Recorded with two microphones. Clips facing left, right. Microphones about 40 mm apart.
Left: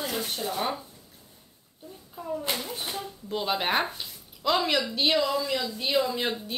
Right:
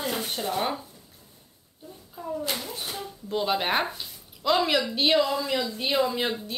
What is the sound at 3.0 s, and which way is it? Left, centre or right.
A woman's voice, centre.